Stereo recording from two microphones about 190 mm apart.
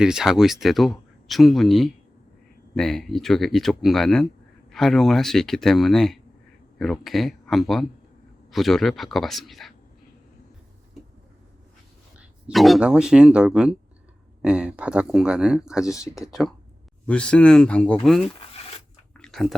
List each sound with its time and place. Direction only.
0.0 s speech: 5° right (ahead or behind)
12.5 s speech: centre (ahead or behind)
19.1 s a sound: 5° left (ahead or behind)